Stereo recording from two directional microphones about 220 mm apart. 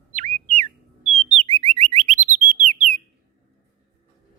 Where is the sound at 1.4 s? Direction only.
25° right (ahead or behind).